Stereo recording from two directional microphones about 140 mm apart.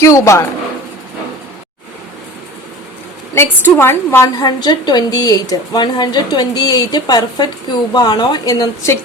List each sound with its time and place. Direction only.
0.0 s a woman's voice: 20° left (ahead or behind)
3.6 s a woman's voice: 15° left (ahead or behind)
4.4 s a woman's voice: 30° left (ahead or behind)